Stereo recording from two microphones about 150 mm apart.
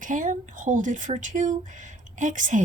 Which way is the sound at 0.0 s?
60° right (ahead or behind).